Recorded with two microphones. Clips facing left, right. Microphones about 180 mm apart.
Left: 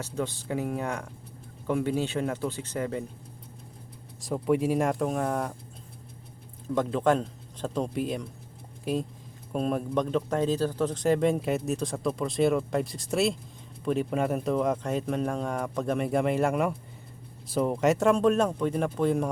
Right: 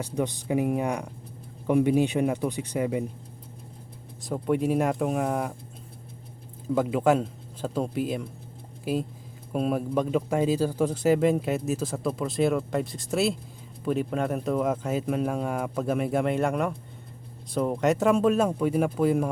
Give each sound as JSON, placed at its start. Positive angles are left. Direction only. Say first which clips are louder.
{"t": 0.0, "sound": "speech", "louder": "right 3 dB", "side_deg": -15}
{"t": 4.2, "sound": "speech", "louder": "even", "side_deg": 0}
{"t": 6.7, "sound": "speech", "louder": "right 2 dB", "side_deg": -5}